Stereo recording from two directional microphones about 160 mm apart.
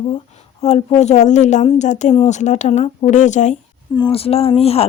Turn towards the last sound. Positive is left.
turn(degrees=40)  # may be behind; listen again after turning